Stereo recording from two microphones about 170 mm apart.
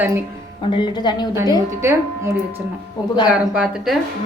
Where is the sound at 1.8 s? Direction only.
15° right (ahead or behind).